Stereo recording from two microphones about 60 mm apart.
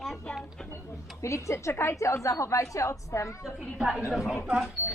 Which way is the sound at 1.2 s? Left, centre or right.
Left.